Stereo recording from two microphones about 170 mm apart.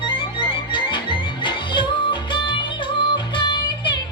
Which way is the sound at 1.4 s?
25° left (ahead or behind).